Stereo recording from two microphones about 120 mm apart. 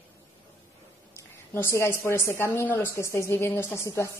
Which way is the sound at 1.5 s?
20° left (ahead or behind).